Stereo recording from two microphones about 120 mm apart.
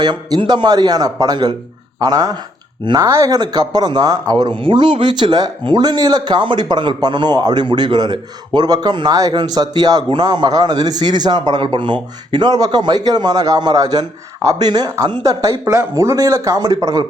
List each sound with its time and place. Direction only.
0.0 s speech: 35° right (ahead or behind)